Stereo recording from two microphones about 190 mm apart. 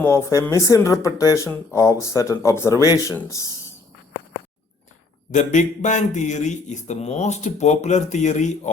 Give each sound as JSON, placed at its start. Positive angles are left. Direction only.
{"t": 0.0, "sound": "speech", "side_deg": 15}
{"t": 5.3, "sound": "speech", "side_deg": 40}